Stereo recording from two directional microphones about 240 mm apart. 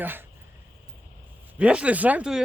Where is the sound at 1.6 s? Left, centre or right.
Centre.